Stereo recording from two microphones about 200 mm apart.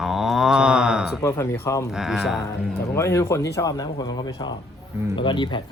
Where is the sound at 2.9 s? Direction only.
15° left (ahead or behind).